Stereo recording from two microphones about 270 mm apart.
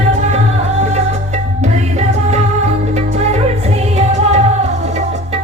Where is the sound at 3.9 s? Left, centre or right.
Right.